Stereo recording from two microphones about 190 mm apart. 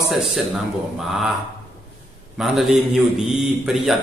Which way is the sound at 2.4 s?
Centre (ahead or behind).